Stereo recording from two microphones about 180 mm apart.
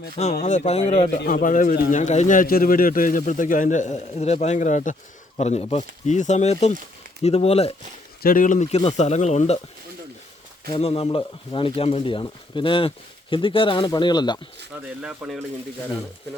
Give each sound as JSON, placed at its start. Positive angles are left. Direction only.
{"t": 0.4, "sound": "speech", "side_deg": 35}
{"t": 1.3, "sound": "a man's voice", "side_deg": 50}
{"t": 8.2, "sound": "speech", "side_deg": 50}
{"t": 10.7, "sound": "speech", "side_deg": 35}
{"t": 15.0, "sound": "speech", "side_deg": -5}